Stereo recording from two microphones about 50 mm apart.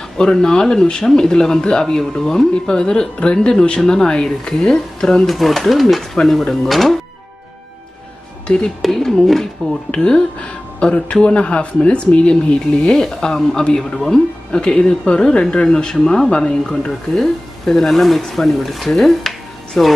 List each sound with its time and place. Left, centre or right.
0.2 s speech: centre
8.5 s speech: left
8.8 s speech: centre
9.9 s speech: centre
18.9 s music: centre